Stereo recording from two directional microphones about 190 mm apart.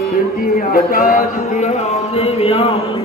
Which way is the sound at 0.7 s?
50° left (ahead or behind).